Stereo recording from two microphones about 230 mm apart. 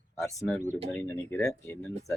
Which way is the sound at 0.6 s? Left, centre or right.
Right.